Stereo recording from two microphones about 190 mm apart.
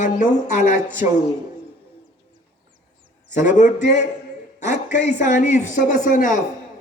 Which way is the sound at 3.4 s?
40° left (ahead or behind).